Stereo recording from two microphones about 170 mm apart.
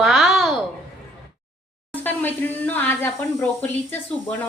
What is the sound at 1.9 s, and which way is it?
Speech, 10° left (ahead or behind).